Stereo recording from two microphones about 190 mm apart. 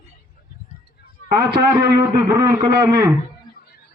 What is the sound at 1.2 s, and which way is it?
Speech, 55° right (ahead or behind).